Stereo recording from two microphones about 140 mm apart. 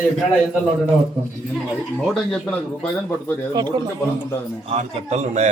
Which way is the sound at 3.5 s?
30° right (ahead or behind).